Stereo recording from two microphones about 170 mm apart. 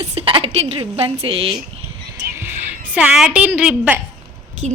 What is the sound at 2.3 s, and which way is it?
A woman's voice, 15° right (ahead or behind).